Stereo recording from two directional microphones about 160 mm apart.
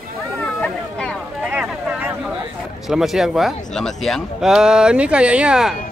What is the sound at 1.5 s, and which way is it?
Vehicle, 5° right (ahead or behind).